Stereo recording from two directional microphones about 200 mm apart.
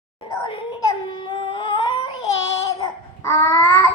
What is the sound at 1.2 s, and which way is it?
Humming, 25° left (ahead or behind).